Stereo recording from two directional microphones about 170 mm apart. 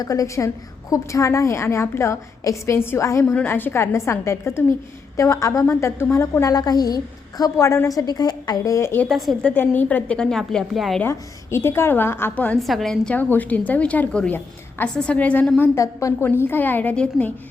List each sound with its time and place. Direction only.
0.0 s a woman's voice: 20° left (ahead or behind)
9.0 s a woman's voice: centre (ahead or behind)
11.0 s a woman's voice: 15° left (ahead or behind)